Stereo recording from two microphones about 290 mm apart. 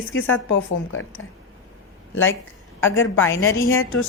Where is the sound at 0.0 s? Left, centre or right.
Left.